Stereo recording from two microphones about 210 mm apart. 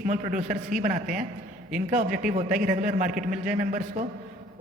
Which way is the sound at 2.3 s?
35° right (ahead or behind).